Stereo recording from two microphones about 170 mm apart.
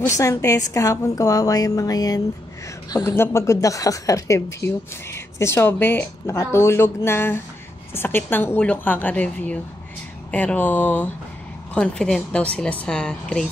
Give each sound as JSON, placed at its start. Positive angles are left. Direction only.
{"t": 0.2, "sound": "a woman's voice", "side_deg": 15}